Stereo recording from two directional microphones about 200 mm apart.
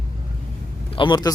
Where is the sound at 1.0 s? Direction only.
20° left (ahead or behind).